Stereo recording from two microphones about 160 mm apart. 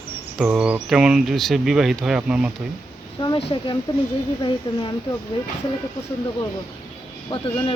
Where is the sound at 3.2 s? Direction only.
35° left (ahead or behind).